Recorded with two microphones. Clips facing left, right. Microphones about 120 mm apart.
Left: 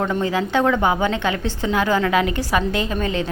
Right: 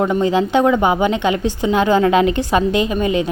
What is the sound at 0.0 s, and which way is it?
A woman's voice, 20° right (ahead or behind).